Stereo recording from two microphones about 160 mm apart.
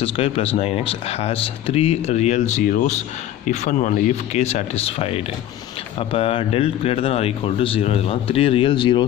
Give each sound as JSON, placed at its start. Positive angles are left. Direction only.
{"t": 0.0, "sound": "speech", "side_deg": 35}